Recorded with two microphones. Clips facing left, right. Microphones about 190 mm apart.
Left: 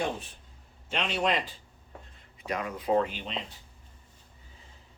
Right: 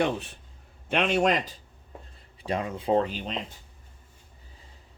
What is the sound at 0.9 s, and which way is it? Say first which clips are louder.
Speech: right 5 dB; 55° right (ahead or behind).